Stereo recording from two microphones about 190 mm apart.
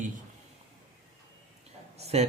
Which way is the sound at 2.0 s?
35° right (ahead or behind).